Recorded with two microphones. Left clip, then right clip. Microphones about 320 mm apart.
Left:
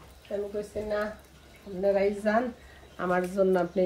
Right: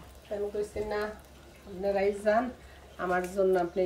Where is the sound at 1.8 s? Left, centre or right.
Centre.